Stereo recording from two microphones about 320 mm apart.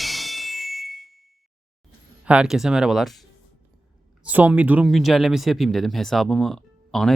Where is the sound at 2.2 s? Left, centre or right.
Centre.